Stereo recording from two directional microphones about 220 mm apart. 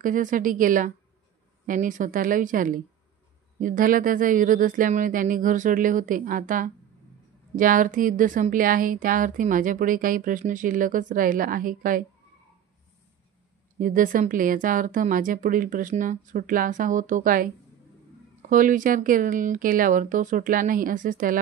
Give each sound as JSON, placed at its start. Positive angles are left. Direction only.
{"t": 0.0, "sound": "speech", "side_deg": -35}
{"t": 13.7, "sound": "speech", "side_deg": -40}
{"t": 18.5, "sound": "speech", "side_deg": -35}